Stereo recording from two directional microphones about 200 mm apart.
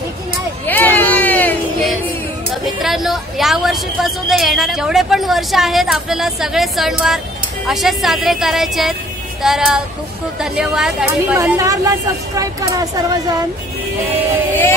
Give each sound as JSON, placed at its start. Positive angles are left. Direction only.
{"t": 0.7, "sound": "a sound", "side_deg": 10}
{"t": 2.6, "sound": "speech", "side_deg": 0}
{"t": 11.3, "sound": "speech", "side_deg": -15}